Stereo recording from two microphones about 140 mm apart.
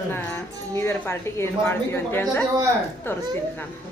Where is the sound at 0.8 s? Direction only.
15° left (ahead or behind).